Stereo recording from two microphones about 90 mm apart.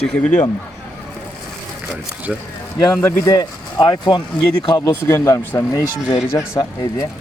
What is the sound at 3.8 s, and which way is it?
Speech, 60° left (ahead or behind).